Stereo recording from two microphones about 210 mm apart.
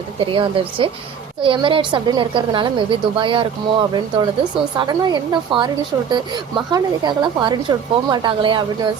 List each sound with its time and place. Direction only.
0.2 s a woman's voice: 25° right (ahead or behind)